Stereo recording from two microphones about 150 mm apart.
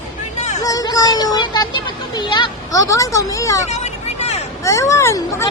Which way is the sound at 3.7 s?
45° left (ahead or behind).